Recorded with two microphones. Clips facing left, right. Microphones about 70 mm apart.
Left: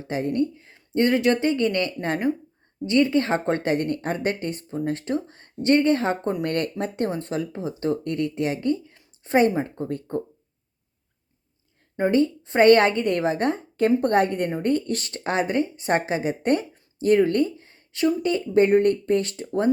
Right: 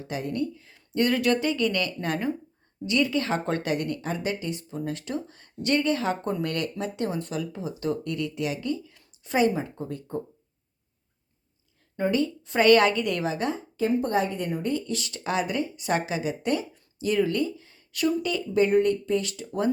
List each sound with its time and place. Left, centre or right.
0.0 s speech: left
11.9 s speech: left